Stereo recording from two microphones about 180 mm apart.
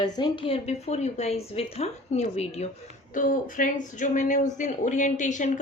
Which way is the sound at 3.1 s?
50° left (ahead or behind).